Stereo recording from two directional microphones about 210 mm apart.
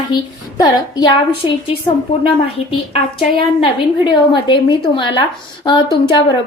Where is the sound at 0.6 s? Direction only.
20° left (ahead or behind).